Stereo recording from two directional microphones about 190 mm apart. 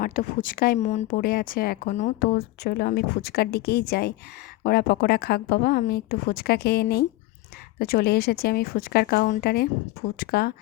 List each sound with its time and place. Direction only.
0.0 s speech: 45° left (ahead or behind)
0.9 s speech: 35° left (ahead or behind)
1.1 s speech: 50° left (ahead or behind)
2.6 s speech: 55° left (ahead or behind)